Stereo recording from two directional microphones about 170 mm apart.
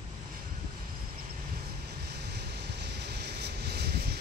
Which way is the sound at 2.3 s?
75° right (ahead or behind).